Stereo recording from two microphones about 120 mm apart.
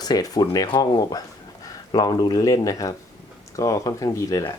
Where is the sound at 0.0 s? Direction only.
35° left (ahead or behind).